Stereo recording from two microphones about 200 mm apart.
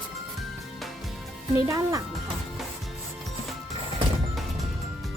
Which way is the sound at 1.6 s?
15° right (ahead or behind).